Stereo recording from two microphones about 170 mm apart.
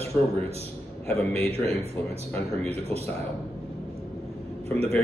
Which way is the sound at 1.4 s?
35° right (ahead or behind).